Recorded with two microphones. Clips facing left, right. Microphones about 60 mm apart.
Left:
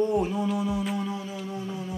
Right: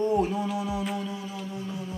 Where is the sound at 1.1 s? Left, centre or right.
Left.